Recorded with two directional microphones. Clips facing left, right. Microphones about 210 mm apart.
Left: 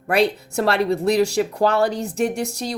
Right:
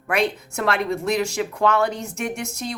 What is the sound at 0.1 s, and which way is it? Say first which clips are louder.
Speech: left 4 dB; 35° left (ahead or behind).